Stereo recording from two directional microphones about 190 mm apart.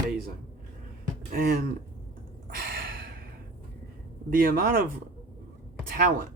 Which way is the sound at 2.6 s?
55° right (ahead or behind).